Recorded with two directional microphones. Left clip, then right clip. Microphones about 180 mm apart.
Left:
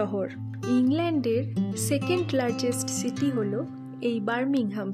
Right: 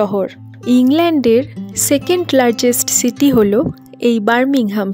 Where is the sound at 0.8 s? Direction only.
50° right (ahead or behind).